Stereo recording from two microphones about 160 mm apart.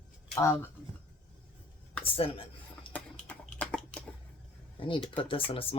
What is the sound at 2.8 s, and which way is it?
Typing, 10° left (ahead or behind).